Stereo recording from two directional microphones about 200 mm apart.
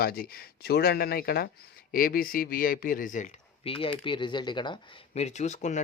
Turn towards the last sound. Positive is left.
turn(degrees=35)  # may be behind; listen again after turning